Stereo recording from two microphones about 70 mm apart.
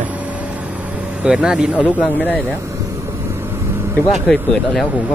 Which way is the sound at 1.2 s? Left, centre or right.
Centre.